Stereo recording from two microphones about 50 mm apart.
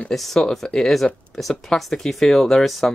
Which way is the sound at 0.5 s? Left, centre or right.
Centre.